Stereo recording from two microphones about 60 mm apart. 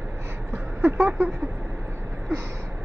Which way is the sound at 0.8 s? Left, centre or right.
Right.